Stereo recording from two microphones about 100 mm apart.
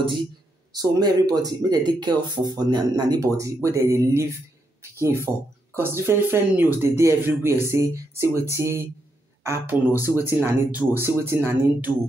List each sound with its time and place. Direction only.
0.7 s speech: 40° right (ahead or behind); by 11.9 s 20° right (ahead or behind)